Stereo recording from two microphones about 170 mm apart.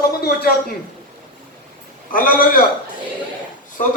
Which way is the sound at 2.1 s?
55° left (ahead or behind).